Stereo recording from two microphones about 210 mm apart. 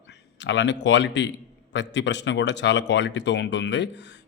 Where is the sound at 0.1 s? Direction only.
55° left (ahead or behind).